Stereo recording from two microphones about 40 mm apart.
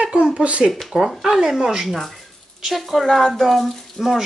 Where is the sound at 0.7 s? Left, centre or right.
Centre.